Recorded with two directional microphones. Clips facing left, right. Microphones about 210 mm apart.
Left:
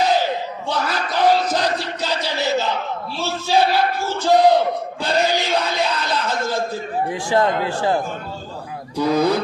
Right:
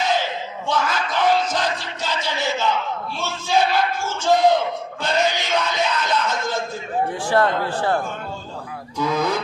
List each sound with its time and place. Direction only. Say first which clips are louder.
0.0 s crowd: left 4 dB; 35° left (ahead or behind)
0.7 s a sound: right 1 dB; 35° left (ahead or behind)
7.3 s a man's voice: left 1 dB; 15° left (ahead or behind)
9.0 s speech: left 5 dB; 35° left (ahead or behind)